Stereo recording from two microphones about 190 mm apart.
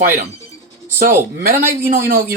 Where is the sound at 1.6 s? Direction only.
15° right (ahead or behind).